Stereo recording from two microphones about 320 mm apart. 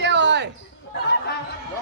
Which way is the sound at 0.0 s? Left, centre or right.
Right.